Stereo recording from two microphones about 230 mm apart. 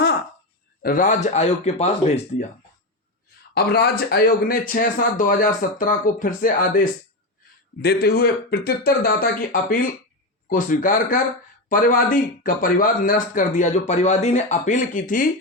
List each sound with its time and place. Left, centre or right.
0.8 s speech: left
3.5 s speech: left